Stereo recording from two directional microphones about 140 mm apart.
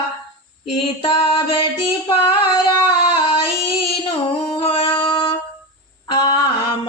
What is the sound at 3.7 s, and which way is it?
Female singing, 45° left (ahead or behind).